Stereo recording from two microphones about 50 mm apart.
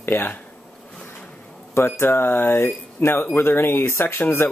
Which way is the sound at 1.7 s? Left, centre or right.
Left.